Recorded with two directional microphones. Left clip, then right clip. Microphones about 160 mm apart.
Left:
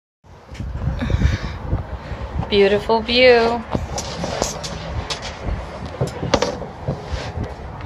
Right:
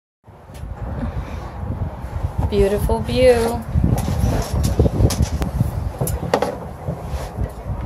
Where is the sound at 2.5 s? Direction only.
15° right (ahead or behind).